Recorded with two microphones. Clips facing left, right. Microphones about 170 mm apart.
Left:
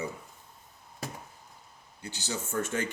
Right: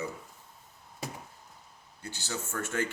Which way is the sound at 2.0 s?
15° left (ahead or behind).